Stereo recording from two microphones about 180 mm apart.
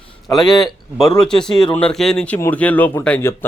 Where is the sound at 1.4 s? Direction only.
5° left (ahead or behind).